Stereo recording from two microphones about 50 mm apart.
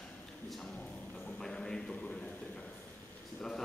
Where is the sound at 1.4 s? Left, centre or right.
Centre.